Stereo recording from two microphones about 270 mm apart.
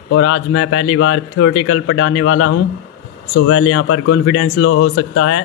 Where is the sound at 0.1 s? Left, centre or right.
Left.